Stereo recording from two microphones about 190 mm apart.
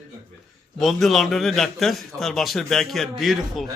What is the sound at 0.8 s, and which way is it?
A man's voice, centre (ahead or behind).